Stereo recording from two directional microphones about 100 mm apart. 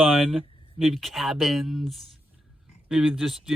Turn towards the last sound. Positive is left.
turn(degrees=0)  # may be behind; listen again after turning